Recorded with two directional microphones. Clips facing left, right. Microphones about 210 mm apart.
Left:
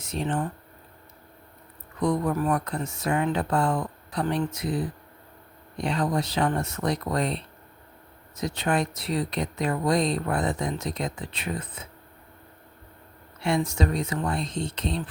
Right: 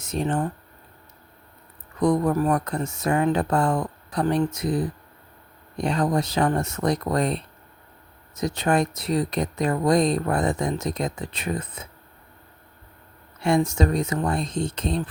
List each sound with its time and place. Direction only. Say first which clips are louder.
0.0 s speech: right 3 dB; 45° right (ahead or behind)
2.0 s speech: right 4 dB; 45° right (ahead or behind)
13.4 s speech: right 4 dB; 45° right (ahead or behind)